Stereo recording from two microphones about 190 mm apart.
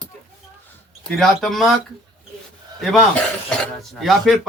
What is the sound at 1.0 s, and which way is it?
Speech, centre (ahead or behind).